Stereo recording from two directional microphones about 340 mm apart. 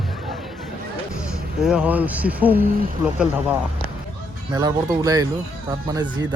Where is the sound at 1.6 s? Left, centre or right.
Centre.